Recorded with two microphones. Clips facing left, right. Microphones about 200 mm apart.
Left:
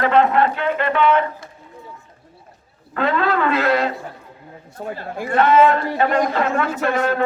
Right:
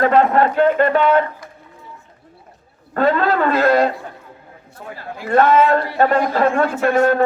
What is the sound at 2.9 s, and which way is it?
Speech, 40° right (ahead or behind).